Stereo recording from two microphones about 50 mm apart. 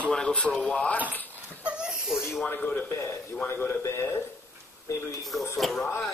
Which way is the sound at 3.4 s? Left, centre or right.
Left.